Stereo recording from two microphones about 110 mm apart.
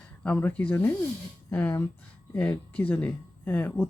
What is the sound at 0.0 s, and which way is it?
Speech, 10° left (ahead or behind).